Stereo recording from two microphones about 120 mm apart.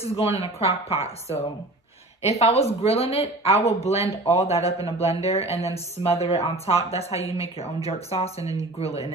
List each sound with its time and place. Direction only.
0.0 s speech: 55° left (ahead or behind)